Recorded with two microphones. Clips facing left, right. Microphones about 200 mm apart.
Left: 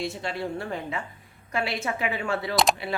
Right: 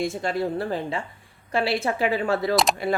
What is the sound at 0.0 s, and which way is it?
Speech, 45° right (ahead or behind).